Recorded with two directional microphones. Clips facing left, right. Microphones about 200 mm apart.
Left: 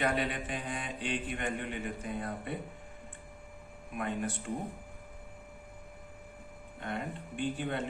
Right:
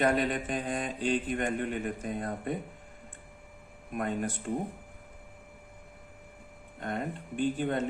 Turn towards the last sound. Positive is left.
turn(degrees=-45)  # may be behind; listen again after turning